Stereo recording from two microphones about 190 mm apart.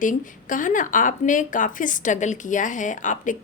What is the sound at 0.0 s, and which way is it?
Speech, 45° left (ahead or behind).